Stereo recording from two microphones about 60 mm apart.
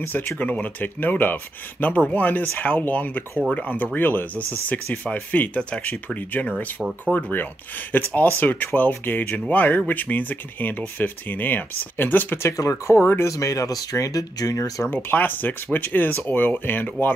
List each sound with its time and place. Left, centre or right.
0.4 s speech: left
12.5 s speech: left
13.2 s speech: left
14.9 s speech: left